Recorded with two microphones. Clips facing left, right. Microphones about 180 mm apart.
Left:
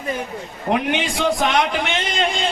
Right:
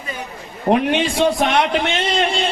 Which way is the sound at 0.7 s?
25° right (ahead or behind).